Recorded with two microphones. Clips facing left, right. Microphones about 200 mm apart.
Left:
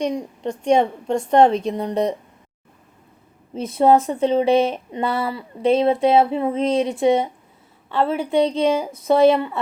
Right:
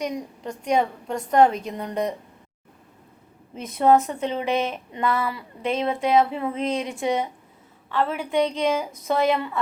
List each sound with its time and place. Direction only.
0.0 s a woman's voice: 30° left (ahead or behind)
3.5 s a woman's voice: 30° left (ahead or behind)